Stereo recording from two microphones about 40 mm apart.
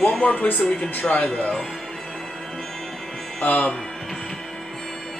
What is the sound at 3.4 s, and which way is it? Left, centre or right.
Speech, left.